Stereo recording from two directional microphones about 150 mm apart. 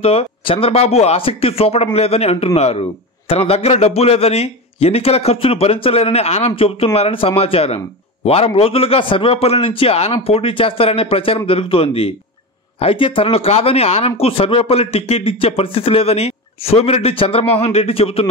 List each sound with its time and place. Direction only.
0.0 s a man's voice: 40° left (ahead or behind)